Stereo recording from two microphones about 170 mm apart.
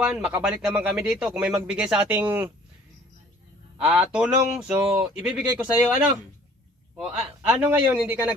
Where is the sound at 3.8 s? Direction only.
5° right (ahead or behind).